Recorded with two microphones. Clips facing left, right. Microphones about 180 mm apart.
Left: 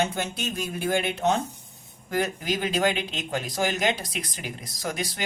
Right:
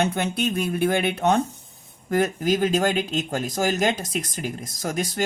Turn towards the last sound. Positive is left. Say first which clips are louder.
# right 5 dB
turn(degrees=-45)  # may be behind; listen again after turning